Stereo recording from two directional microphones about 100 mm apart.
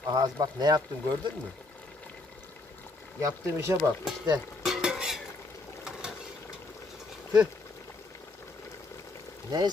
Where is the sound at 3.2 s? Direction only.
30° right (ahead or behind).